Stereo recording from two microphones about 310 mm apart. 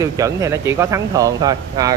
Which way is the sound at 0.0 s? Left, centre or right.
Centre.